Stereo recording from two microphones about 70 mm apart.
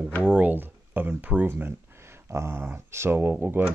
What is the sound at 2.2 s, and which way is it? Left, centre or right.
Speech, right.